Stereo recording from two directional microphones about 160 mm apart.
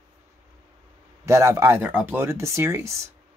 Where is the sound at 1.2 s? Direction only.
15° right (ahead or behind).